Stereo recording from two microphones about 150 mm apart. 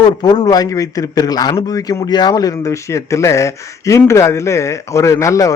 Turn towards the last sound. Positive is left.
turn(degrees=20)  # may be behind; listen again after turning